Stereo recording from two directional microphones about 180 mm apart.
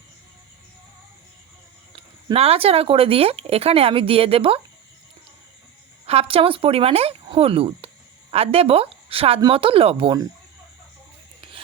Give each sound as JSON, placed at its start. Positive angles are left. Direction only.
{"t": 2.0, "sound": "speech", "side_deg": -35}
{"t": 6.1, "sound": "speech", "side_deg": -30}